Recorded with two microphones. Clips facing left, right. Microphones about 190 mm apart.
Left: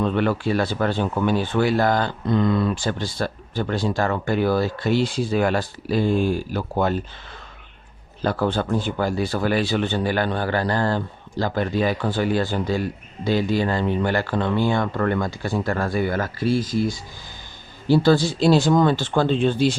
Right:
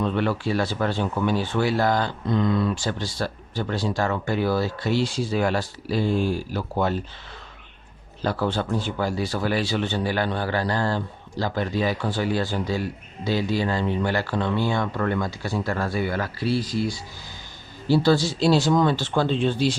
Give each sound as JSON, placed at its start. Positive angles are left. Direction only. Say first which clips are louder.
{"t": 0.0, "sound": "speech", "louder": "left 3 dB", "side_deg": 55}
{"t": 8.2, "sound": "speech", "louder": "left 3 dB", "side_deg": 50}